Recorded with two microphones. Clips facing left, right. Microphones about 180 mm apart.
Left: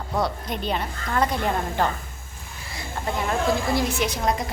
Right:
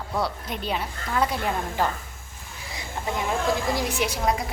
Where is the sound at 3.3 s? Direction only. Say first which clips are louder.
Left 2 dB; 15° right (ahead or behind).